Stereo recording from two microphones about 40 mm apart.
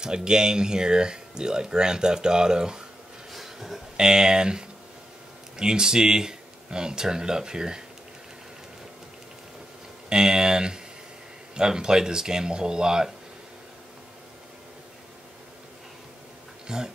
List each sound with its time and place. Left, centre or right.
0.0 s speech: centre
3.3 s a sound: centre
3.9 s speech: centre
10.0 s speech: centre
16.6 s speech: centre